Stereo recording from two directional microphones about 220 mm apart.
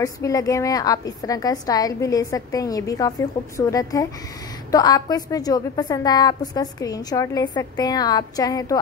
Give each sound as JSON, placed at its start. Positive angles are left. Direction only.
{"t": 0.0, "sound": "a woman's voice", "side_deg": 15}